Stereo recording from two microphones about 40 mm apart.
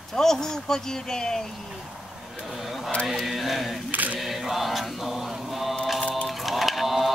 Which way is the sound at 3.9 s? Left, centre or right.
Right.